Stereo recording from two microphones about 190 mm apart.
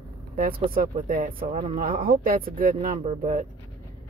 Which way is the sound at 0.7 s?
50° right (ahead or behind).